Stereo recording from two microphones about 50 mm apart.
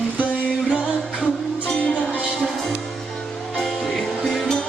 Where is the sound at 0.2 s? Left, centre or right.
Right.